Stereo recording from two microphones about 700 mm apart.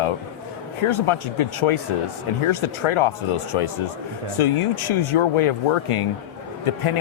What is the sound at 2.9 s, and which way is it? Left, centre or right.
A man's voice, left.